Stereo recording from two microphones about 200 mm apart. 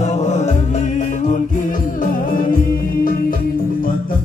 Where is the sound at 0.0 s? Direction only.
35° left (ahead or behind).